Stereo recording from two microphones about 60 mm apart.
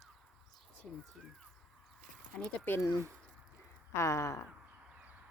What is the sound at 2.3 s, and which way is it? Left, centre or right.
Speech, left.